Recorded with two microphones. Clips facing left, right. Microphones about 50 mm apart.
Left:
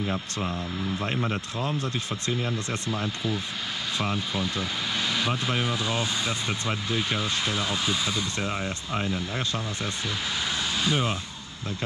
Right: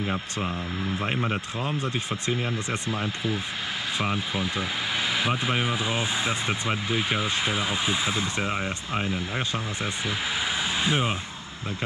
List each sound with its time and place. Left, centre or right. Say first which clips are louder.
0.0 s speech: right 1 dB; centre
10.8 s speech: even; centre